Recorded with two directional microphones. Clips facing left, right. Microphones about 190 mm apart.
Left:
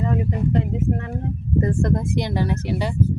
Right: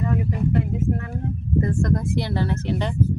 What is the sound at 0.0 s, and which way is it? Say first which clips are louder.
Speech: left 1 dB; 25° left (ahead or behind).